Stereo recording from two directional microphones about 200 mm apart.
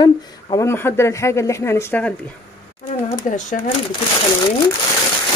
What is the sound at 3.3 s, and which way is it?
Speech, 40° left (ahead or behind).